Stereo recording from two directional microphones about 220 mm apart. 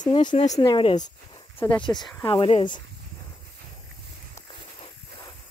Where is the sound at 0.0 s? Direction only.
20° left (ahead or behind).